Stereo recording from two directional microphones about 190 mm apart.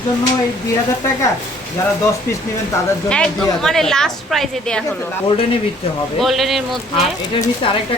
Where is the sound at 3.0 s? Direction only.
5° left (ahead or behind).